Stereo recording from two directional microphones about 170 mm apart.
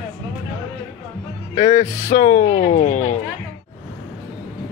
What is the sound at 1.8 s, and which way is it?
Speech, 15° left (ahead or behind).